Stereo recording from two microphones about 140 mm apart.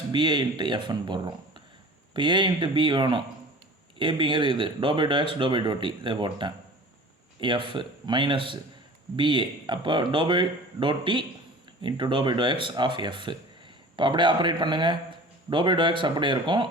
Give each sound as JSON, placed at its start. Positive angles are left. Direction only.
{"t": 0.1, "sound": "a man's voice", "side_deg": -35}